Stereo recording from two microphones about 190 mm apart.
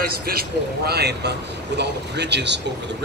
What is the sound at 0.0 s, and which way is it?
A man's voice, 55° right (ahead or behind).